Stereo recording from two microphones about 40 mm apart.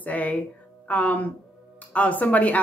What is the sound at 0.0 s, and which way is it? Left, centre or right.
Speech, left.